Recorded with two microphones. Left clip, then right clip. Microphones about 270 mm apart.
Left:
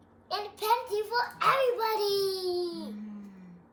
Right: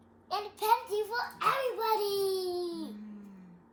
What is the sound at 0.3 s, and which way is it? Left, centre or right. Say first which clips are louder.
A child's voice: even; centre.